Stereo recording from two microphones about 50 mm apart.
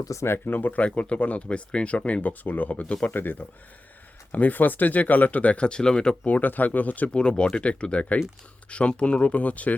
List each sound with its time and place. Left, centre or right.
0.3 s speech: left
0.9 s speech: left
6.2 s speech: left
7.1 s speech: centre